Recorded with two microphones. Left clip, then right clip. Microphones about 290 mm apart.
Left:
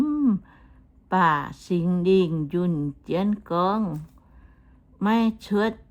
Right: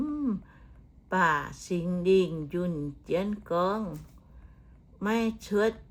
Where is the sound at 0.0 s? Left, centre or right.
Left.